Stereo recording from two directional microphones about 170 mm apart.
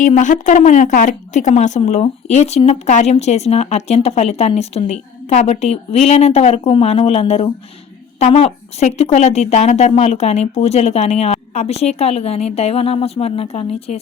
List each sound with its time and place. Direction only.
0.0 s speech: 45° left (ahead or behind)